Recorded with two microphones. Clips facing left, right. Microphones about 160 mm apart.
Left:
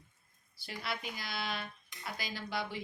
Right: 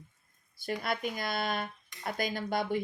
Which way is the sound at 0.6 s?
50° right (ahead or behind).